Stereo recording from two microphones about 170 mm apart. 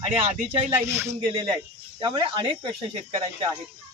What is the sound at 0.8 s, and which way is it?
Speech, 15° right (ahead or behind).